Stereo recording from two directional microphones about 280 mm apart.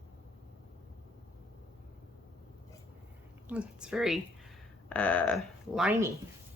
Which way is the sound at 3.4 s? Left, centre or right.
Centre.